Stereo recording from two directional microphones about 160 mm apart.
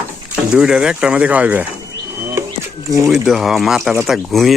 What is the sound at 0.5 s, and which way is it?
Speech, 5° right (ahead or behind).